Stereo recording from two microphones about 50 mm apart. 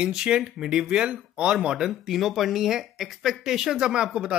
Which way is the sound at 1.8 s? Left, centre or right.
Centre.